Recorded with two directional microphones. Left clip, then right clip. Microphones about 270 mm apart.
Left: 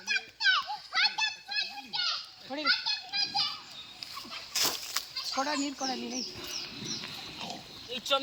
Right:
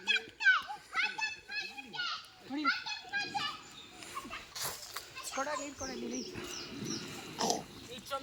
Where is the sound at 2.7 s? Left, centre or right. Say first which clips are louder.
Left 5 dB; centre.